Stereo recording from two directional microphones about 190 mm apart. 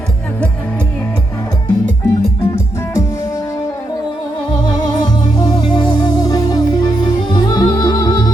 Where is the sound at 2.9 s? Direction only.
15° left (ahead or behind).